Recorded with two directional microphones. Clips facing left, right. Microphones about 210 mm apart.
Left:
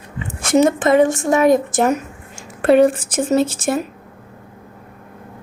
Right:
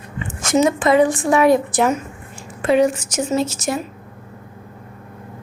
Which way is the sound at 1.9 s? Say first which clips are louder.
Left 2 dB; 65° left (ahead or behind).